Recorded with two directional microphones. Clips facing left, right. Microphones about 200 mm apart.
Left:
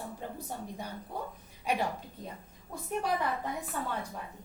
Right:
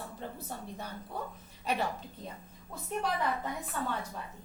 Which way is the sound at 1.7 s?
10° left (ahead or behind).